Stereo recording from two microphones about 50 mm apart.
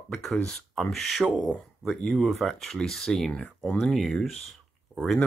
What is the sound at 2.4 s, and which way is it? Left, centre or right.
Speech, centre.